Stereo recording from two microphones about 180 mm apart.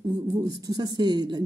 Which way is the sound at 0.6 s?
20° right (ahead or behind).